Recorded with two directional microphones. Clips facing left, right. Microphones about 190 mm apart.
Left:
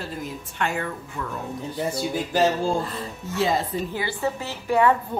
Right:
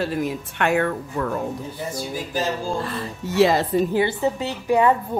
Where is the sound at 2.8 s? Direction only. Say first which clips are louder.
Right 4 dB; 75° right (ahead or behind).